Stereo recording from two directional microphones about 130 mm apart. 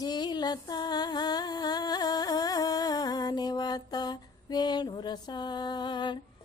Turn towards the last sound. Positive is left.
turn(degrees=35)  # may be behind; listen again after turning